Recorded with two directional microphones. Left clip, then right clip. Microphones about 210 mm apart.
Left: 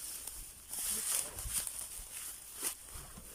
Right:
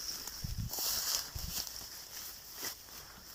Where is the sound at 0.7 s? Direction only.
15° right (ahead or behind).